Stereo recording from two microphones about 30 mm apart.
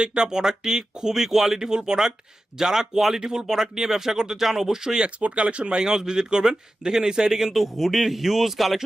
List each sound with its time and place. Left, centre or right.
0.0 s speech: right
0.3 s a man's voice: right
5.2 s speech: right
5.8 s a man's voice: right; by 8.8 s centre